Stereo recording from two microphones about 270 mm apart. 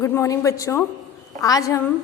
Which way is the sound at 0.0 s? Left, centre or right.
Centre.